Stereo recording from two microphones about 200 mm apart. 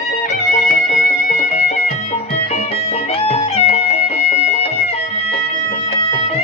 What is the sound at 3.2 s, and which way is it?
Music, 35° left (ahead or behind).